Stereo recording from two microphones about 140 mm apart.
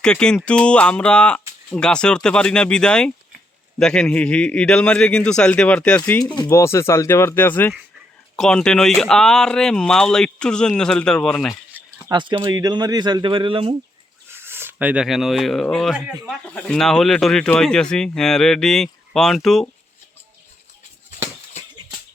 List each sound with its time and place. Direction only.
0.0 s speech: 5° left (ahead or behind)
11.8 s a sound: 10° right (ahead or behind)
12.1 s speech: 35° right (ahead or behind)
14.3 s speech: 15° right (ahead or behind); by 19.6 s centre (ahead or behind)